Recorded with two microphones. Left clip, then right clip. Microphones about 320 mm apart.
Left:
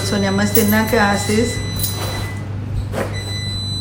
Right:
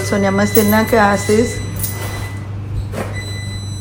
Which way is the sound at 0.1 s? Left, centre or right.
Centre.